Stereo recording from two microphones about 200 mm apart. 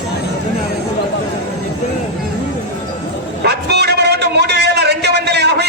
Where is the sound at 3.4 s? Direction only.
55° right (ahead or behind).